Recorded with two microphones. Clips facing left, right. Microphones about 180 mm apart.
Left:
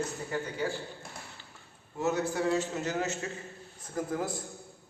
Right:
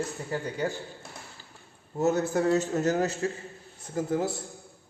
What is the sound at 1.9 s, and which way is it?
A man's voice, 45° right (ahead or behind).